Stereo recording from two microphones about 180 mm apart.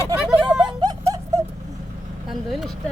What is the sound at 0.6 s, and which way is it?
Snicker, 20° right (ahead or behind).